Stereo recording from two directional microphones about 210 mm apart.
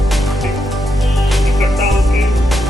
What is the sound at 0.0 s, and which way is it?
Music, centre (ahead or behind).